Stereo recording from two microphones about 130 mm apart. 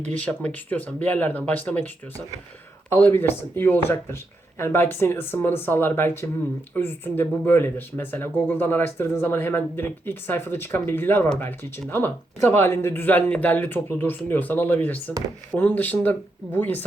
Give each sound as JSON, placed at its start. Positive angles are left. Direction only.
{"t": 0.1, "sound": "speech", "side_deg": 10}
{"t": 2.9, "sound": "speech", "side_deg": 15}